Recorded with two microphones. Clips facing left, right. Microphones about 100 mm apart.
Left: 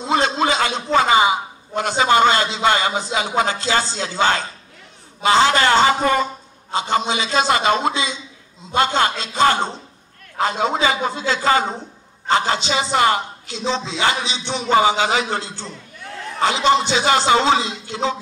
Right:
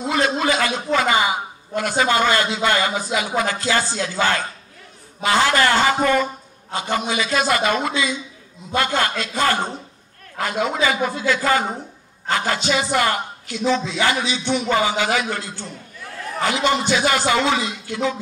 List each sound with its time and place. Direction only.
0.0 s a man's voice: 25° left (ahead or behind)